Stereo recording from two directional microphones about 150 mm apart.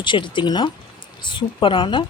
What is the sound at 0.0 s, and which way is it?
Speech, 30° left (ahead or behind).